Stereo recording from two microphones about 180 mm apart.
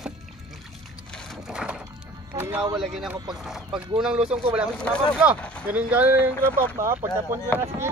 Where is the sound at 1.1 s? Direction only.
Centre (ahead or behind).